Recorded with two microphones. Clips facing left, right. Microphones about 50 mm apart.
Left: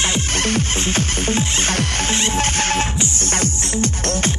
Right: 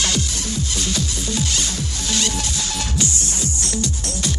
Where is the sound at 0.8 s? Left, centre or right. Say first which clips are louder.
Left 5 dB; left.